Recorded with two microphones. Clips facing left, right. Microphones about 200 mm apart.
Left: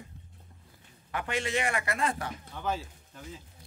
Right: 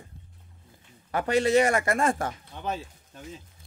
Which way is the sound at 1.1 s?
40° right (ahead or behind).